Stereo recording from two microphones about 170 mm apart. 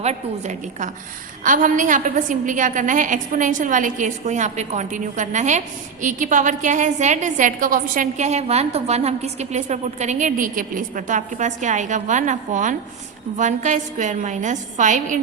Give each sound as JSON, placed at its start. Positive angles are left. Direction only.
{"t": 0.0, "sound": "a woman's voice", "side_deg": -40}